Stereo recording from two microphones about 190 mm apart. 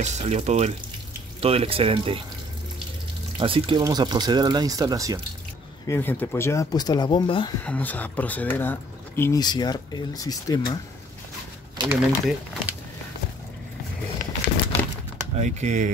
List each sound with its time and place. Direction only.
0.0 s speech: 35° right (ahead or behind)
3.3 s speech: 30° right (ahead or behind)
5.9 s speech: 10° left (ahead or behind)
7.6 s speech: 10° left (ahead or behind)
11.9 s speech: 10° right (ahead or behind)
15.3 s speech: 35° right (ahead or behind)